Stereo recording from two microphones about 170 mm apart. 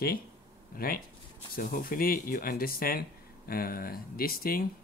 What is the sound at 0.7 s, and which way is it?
Speech, 60° left (ahead or behind).